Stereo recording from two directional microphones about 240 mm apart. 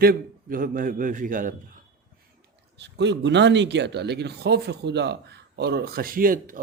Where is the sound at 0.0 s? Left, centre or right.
Right.